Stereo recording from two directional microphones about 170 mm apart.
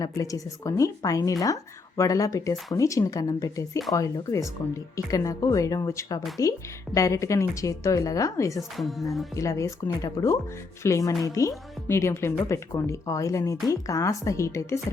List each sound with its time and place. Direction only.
0.0 s a woman's voice: 20° left (ahead or behind)
8.7 s music: centre (ahead or behind)
9.3 s speech: 20° left (ahead or behind)